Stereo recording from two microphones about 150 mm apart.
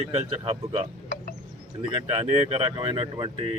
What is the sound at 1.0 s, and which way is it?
Music, 55° left (ahead or behind).